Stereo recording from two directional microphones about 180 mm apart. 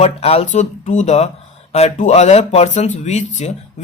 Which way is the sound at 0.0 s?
35° left (ahead or behind).